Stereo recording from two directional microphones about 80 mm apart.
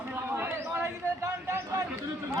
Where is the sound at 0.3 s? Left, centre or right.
Right.